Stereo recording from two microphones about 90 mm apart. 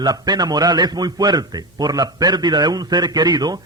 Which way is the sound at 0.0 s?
50° right (ahead or behind).